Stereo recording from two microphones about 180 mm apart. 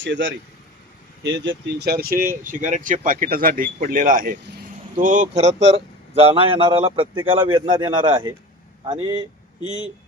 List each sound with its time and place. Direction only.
0.0 s speech: 90° right
1.2 s speech: 70° right (ahead or behind); by 9.2 s 25° right (ahead or behind)